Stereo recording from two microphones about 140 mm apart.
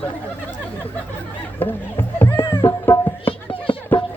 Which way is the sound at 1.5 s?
15° left (ahead or behind).